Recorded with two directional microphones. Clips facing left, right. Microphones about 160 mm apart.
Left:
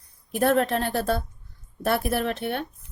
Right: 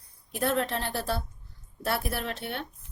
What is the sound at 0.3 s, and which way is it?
Speech, 55° left (ahead or behind).